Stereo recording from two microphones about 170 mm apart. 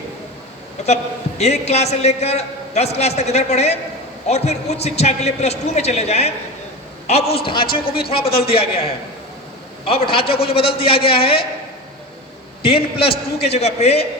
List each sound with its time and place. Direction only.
1.4 s a man's voice: 40° left (ahead or behind)
12.6 s a man's voice: 35° left (ahead or behind)